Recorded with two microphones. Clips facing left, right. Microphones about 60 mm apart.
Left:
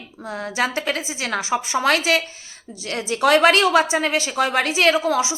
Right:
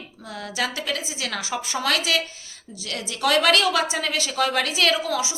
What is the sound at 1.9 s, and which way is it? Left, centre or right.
A woman's voice, left.